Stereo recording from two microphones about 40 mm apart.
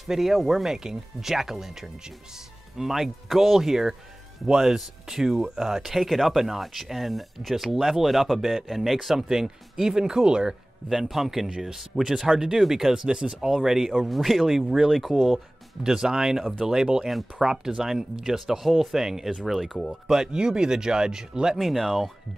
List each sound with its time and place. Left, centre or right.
0.0 s speech: centre
10.9 s speech: centre
15.8 s speech: centre
20.3 s speech: centre
21.5 s speech: centre